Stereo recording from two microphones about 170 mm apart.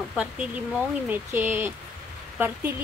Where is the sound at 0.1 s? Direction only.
5° right (ahead or behind).